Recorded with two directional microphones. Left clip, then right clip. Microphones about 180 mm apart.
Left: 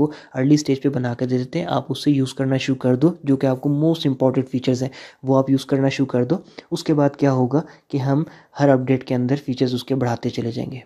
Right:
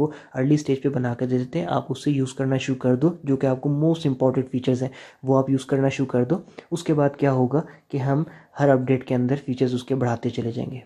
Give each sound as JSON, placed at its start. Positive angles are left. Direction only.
{"t": 0.0, "sound": "speech", "side_deg": 30}